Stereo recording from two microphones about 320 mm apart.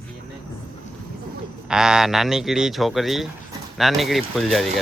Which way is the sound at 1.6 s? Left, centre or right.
Centre.